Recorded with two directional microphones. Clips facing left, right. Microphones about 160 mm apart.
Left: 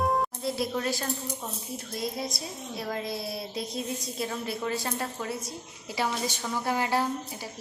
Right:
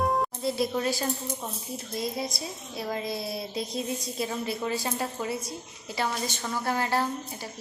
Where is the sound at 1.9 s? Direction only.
Centre (ahead or behind).